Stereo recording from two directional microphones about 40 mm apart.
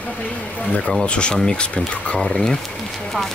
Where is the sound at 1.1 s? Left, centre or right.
Left.